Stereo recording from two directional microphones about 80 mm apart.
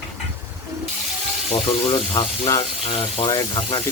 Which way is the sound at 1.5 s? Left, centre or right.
Left.